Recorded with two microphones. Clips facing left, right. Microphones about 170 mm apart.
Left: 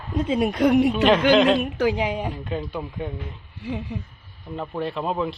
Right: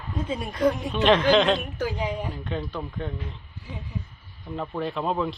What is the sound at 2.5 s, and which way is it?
Speech, 5° left (ahead or behind).